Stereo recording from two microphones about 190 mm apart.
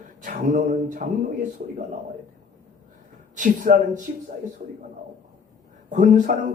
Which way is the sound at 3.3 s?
45° right (ahead or behind).